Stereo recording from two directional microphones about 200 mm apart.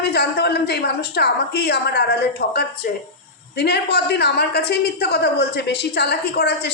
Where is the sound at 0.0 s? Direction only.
55° left (ahead or behind).